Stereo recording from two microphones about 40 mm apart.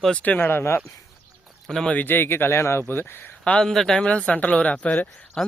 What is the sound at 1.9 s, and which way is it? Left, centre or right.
Speech, left.